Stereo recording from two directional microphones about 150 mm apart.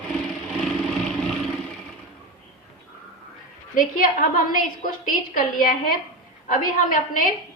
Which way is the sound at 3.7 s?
65° left (ahead or behind).